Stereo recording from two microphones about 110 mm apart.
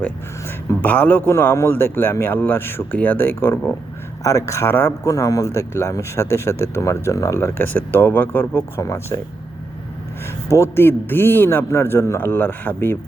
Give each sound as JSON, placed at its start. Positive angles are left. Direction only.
{"t": 0.4, "sound": "speech", "side_deg": 20}
{"t": 4.2, "sound": "speech", "side_deg": 30}
{"t": 10.5, "sound": "speech", "side_deg": 25}